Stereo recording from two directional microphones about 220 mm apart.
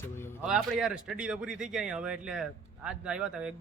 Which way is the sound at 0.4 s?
5° right (ahead or behind).